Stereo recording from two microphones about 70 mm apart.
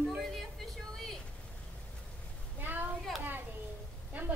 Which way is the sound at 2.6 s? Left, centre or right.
Right.